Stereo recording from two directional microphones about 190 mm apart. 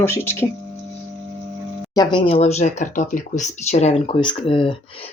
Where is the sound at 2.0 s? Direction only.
25° left (ahead or behind).